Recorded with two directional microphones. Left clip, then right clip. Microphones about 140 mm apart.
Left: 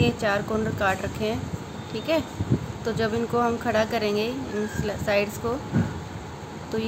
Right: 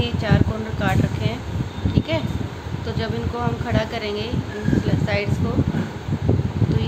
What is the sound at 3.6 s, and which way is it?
Speech, 45° left (ahead or behind).